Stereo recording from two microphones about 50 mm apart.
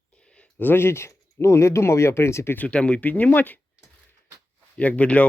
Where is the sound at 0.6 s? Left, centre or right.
Left.